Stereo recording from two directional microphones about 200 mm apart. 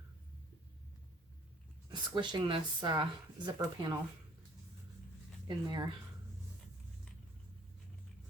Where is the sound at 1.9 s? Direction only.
20° right (ahead or behind).